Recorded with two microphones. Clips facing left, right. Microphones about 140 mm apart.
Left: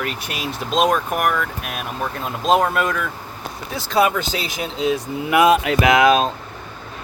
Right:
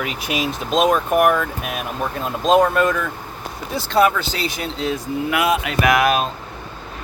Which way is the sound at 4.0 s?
15° left (ahead or behind).